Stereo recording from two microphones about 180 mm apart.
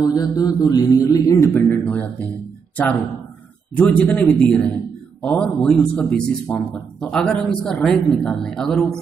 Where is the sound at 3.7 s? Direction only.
10° left (ahead or behind).